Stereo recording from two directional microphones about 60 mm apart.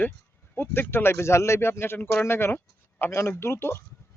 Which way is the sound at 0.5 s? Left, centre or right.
Left.